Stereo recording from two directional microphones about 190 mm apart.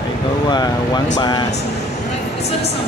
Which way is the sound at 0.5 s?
20° left (ahead or behind).